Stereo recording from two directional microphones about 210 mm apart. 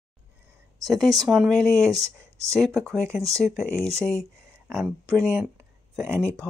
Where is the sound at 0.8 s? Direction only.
Centre (ahead or behind).